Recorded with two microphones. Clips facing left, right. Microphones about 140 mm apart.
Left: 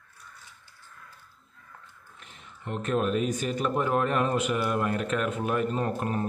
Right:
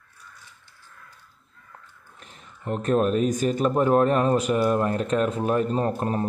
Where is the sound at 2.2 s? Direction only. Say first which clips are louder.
Right 6 dB; 40° right (ahead or behind).